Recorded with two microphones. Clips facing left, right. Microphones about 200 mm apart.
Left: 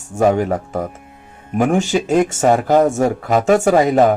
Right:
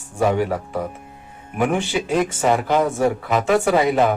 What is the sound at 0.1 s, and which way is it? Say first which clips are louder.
Speech: left 4 dB; 45° left (ahead or behind).